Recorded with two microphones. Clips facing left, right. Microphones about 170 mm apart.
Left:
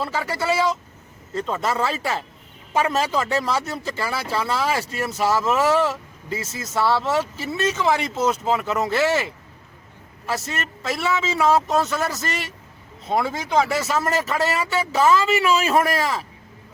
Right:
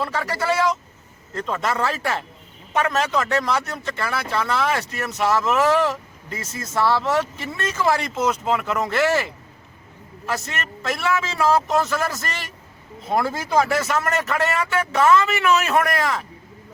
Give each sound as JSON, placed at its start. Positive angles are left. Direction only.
{"t": 0.0, "sound": "a man's voice", "side_deg": 0}
{"t": 4.9, "sound": "speech", "side_deg": 30}
{"t": 5.2, "sound": "a man's voice", "side_deg": 5}